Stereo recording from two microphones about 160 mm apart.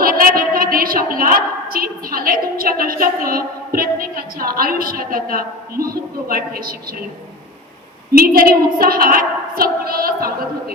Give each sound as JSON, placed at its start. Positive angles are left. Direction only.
{"t": 0.0, "sound": "a woman's voice", "side_deg": -65}
{"t": 8.1, "sound": "a woman's voice", "side_deg": -70}